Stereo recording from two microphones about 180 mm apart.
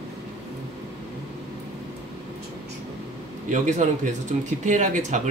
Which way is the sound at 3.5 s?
45° right (ahead or behind).